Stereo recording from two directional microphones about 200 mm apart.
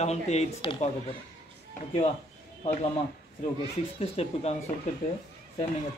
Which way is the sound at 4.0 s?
30° left (ahead or behind).